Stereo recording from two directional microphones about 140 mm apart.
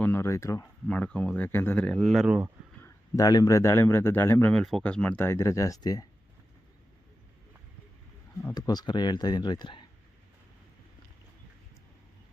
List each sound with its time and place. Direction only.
0.0 s speech: 15° left (ahead or behind)
0.9 s speech: 10° left (ahead or behind); by 2.5 s 10° right (ahead or behind)
2.8 s speech: 25° left (ahead or behind)
4.5 s speech: 5° left (ahead or behind); by 6.1 s 25° left (ahead or behind)
8.5 s speech: 30° left (ahead or behind)